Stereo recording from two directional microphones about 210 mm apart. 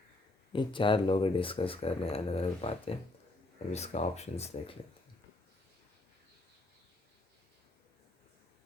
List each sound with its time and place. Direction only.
0.5 s speech: 20° left (ahead or behind)